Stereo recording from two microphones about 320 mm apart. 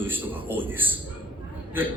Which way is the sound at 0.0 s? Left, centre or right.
Centre.